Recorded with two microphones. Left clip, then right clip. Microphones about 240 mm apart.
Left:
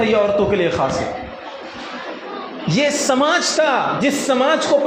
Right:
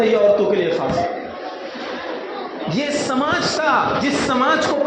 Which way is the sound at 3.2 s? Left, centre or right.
Left.